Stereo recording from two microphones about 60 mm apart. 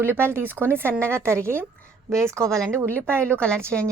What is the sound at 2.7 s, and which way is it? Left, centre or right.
Speech, right.